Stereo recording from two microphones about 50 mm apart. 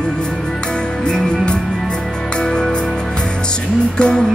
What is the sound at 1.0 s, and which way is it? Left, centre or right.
Music, centre.